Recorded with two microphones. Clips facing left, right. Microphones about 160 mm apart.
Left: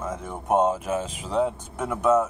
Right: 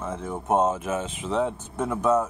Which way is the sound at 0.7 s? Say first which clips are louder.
Left 1 dB; 30° left (ahead or behind).